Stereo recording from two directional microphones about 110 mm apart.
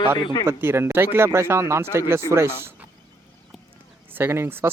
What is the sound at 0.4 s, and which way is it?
Speech, 20° right (ahead or behind).